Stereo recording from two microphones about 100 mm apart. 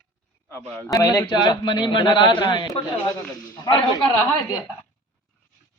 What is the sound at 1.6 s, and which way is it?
A man's voice, 50° left (ahead or behind).